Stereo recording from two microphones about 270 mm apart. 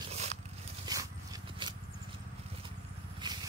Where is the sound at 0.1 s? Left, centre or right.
Right.